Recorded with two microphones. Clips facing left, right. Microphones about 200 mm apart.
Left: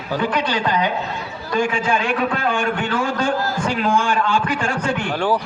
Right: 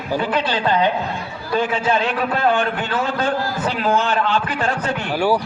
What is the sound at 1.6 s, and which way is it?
Speech, 10° left (ahead or behind).